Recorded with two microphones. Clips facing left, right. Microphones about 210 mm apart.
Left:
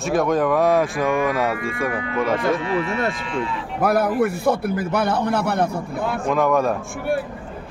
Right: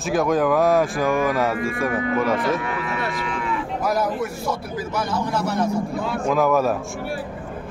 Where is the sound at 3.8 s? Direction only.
60° left (ahead or behind).